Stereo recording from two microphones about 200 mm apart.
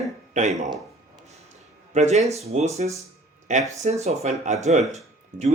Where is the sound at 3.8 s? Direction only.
30° right (ahead or behind).